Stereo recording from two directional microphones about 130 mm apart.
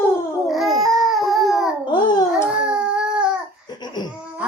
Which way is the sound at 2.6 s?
5° right (ahead or behind).